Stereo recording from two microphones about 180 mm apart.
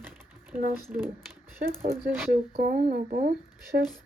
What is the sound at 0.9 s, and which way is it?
Speech, 10° right (ahead or behind).